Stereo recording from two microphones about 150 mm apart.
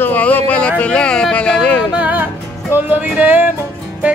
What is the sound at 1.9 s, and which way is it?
Music, 10° right (ahead or behind).